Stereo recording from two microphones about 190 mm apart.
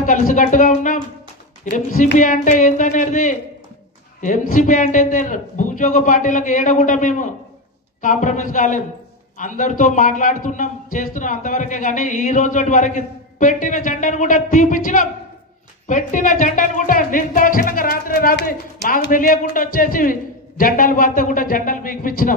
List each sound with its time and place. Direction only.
0.0 s a woman's voice: 45° left (ahead or behind)